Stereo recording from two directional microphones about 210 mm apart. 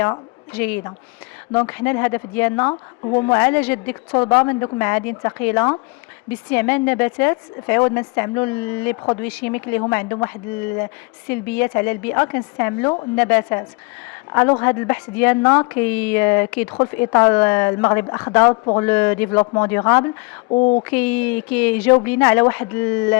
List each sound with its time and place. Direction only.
0.0 s a woman's voice: 10° left (ahead or behind)
20.5 s speech: 30° left (ahead or behind)
20.8 s a woman's voice: 10° left (ahead or behind)